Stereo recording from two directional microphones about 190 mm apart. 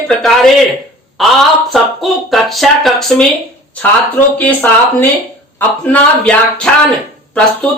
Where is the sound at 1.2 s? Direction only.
Centre (ahead or behind).